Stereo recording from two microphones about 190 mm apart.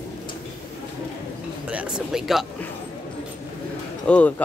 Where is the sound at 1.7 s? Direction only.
5° right (ahead or behind).